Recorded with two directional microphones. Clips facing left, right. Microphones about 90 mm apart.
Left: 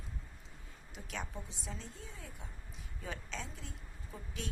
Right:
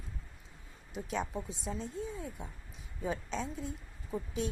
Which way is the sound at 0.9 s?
25° right (ahead or behind).